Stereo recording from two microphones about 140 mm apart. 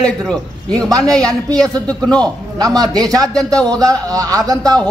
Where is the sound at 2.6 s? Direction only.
30° right (ahead or behind).